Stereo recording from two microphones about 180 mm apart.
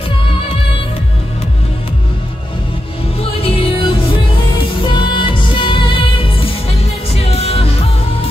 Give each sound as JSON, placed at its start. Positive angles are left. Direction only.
{"t": 3.2, "sound": "music", "side_deg": 30}